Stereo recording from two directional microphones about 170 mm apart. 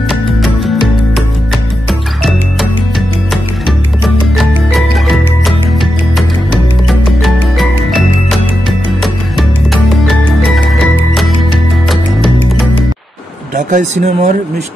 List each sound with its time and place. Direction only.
0.1 s music: centre (ahead or behind)
4.0 s music: centre (ahead or behind)
6.9 s music: centre (ahead or behind)
13.6 s speech: 45° right (ahead or behind)